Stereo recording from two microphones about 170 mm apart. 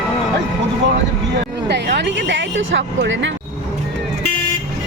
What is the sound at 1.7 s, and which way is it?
Speech, 90° right.